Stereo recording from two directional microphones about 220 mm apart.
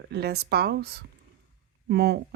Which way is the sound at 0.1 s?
50° right (ahead or behind).